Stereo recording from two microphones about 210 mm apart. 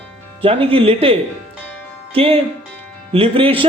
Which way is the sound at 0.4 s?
25° right (ahead or behind).